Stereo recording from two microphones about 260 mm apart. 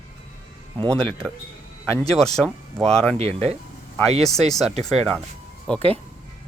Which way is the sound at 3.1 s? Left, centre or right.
Right.